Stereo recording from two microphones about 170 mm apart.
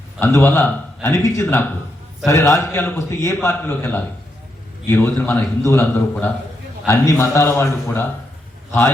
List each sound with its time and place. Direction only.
0.2 s a man's voice: 15° left (ahead or behind)